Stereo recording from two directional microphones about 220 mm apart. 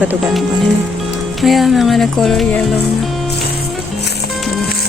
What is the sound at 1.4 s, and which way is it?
Speech, centre (ahead or behind).